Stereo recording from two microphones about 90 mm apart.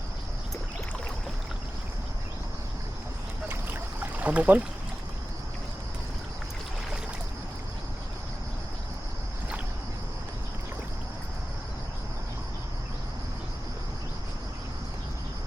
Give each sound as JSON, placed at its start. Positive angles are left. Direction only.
{"t": 3.5, "sound": "trickle", "side_deg": -20}